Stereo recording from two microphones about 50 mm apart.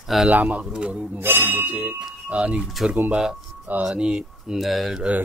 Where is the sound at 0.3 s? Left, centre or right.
Right.